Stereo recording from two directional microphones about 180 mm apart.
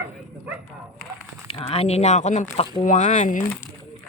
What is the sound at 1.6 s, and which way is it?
Speech, 35° left (ahead or behind).